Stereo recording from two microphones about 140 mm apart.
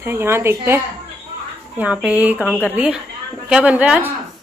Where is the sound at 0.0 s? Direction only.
15° right (ahead or behind).